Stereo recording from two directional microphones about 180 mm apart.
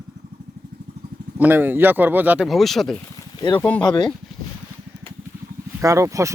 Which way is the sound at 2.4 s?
Centre (ahead or behind).